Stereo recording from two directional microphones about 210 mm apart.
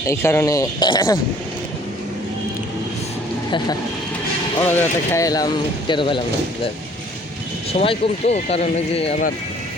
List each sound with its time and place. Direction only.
0.1 s speech: 10° left (ahead or behind)
4.6 s speech: 10° left (ahead or behind)
7.7 s speech: 30° left (ahead or behind)